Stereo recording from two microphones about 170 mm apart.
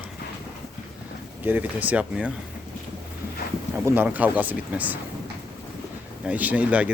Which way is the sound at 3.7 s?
10° right (ahead or behind).